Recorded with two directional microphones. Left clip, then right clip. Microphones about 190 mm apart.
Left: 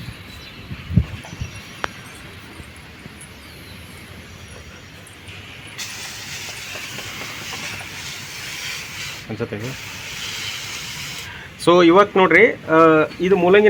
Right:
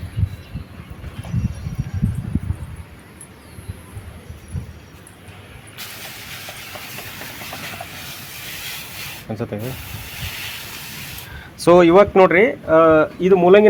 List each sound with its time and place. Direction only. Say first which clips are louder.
9.3 s speech: even; 50° right (ahead or behind)
11.6 s speech: right 2 dB; 55° right (ahead or behind)